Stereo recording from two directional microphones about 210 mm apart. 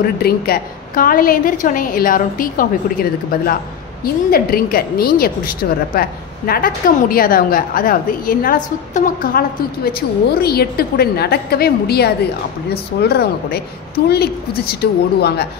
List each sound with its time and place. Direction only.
0.2 s a woman's voice: 45° left (ahead or behind)
10.4 s a woman's voice: 50° left (ahead or behind)